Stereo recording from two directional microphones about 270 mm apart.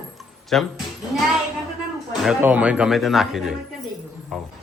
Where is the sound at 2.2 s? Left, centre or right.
Centre.